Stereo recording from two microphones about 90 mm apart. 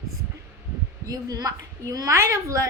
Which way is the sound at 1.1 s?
45° right (ahead or behind).